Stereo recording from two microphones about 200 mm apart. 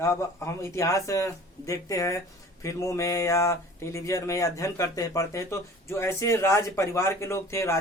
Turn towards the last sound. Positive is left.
turn(degrees=15)  # may be behind; listen again after turning